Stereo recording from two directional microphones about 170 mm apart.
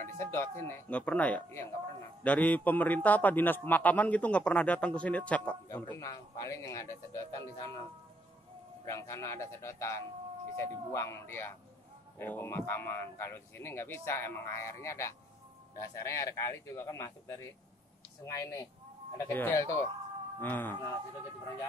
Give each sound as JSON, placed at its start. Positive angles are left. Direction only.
{"t": 0.0, "sound": "a man's voice", "side_deg": 15}
{"t": 8.8, "sound": "a man's voice", "side_deg": 15}